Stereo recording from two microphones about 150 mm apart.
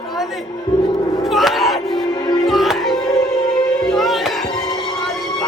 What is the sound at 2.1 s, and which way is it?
Music, 25° left (ahead or behind).